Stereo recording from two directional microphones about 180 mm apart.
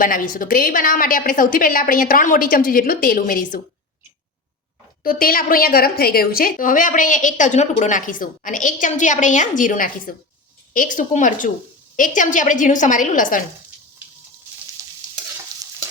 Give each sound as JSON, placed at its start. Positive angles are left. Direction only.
{"t": 0.0, "sound": "a woman's voice", "side_deg": 50}
{"t": 5.0, "sound": "a woman's voice", "side_deg": 55}
{"t": 14.8, "sound": "stir", "side_deg": -15}